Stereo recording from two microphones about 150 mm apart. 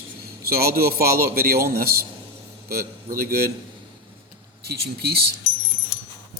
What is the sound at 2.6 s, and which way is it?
Speech, 80° right.